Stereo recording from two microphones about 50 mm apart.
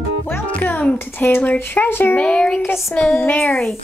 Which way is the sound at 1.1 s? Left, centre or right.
Left.